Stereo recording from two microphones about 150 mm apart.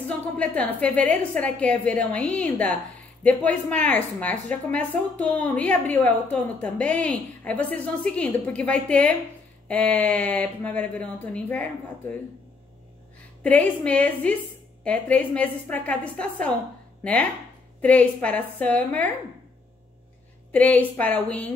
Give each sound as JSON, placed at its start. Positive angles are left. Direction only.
{"t": 0.4, "sound": "a woman's voice", "side_deg": 10}
{"t": 13.4, "sound": "a woman's voice", "side_deg": 10}
{"t": 20.5, "sound": "a woman's voice", "side_deg": 10}